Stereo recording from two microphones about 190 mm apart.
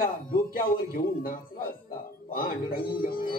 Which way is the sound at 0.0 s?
50° left (ahead or behind).